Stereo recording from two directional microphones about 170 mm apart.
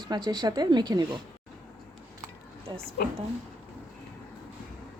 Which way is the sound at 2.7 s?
25° right (ahead or behind).